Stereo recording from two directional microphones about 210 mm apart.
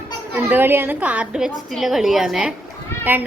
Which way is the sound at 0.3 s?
10° right (ahead or behind).